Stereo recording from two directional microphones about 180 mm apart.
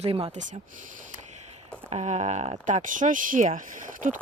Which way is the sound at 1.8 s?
40° right (ahead or behind).